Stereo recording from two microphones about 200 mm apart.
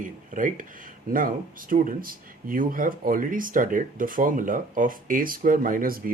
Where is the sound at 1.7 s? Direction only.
40° right (ahead or behind).